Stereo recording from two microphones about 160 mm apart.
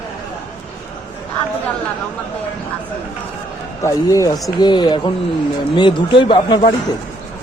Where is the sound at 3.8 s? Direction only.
20° left (ahead or behind).